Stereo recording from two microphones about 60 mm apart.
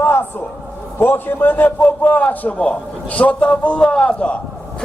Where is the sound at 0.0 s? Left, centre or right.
Left.